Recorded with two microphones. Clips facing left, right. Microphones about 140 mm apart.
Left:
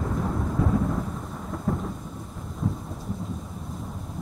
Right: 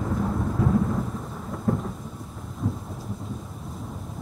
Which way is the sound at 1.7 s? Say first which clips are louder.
Right 3 dB; centre (ahead or behind).